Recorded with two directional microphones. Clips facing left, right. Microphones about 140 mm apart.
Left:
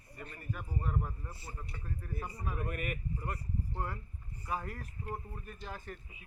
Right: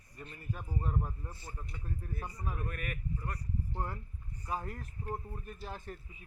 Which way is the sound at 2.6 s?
10° left (ahead or behind).